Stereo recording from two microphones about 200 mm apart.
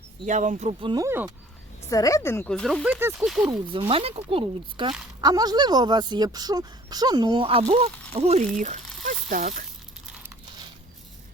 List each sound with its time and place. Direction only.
0.3 s speech: 40° right (ahead or behind)
1.0 s speech: 10° right (ahead or behind)
1.9 s a woman's voice: 15° left (ahead or behind)
2.8 s speech: 10° right (ahead or behind)
3.7 s speech: 25° right (ahead or behind)